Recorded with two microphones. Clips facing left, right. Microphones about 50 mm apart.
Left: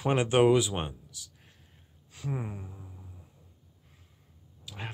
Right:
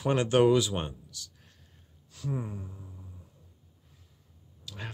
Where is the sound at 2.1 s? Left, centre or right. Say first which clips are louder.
Right 1 dB; left.